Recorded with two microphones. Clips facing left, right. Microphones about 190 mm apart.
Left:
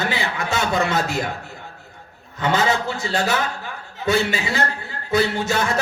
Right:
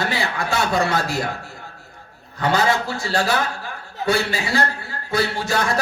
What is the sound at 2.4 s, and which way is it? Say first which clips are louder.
A man's voice: right 1 dB; 20° left (ahead or behind).